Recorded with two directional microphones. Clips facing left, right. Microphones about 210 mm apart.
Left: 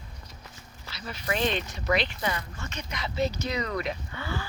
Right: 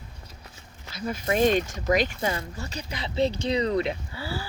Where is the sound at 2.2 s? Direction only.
30° right (ahead or behind).